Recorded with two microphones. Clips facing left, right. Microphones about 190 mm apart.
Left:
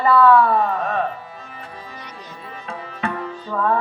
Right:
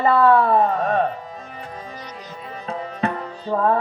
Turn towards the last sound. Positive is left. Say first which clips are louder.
# right 2 dB
turn(degrees=-30)  # may be behind; listen again after turning